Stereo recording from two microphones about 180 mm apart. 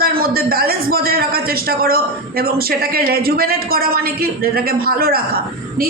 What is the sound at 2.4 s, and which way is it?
Speech, 60° right (ahead or behind).